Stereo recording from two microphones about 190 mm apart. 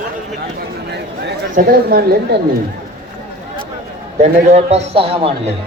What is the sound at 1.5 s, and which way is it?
Speech, 50° right (ahead or behind).